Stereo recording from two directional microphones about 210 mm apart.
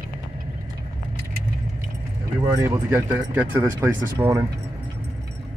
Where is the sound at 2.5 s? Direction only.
15° right (ahead or behind).